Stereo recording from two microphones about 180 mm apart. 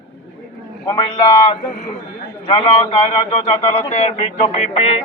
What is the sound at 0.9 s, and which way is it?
A man's voice, 25° left (ahead or behind).